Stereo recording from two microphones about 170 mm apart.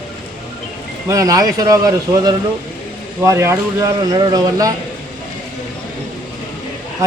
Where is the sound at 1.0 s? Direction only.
20° right (ahead or behind).